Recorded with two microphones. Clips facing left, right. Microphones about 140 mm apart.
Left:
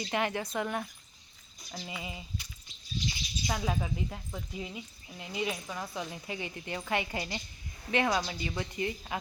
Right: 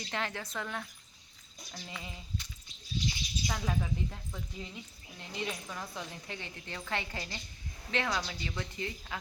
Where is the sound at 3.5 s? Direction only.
10° left (ahead or behind).